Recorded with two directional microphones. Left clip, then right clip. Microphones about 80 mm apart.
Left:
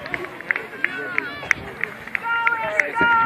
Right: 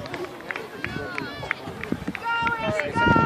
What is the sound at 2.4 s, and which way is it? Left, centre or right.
Run, right.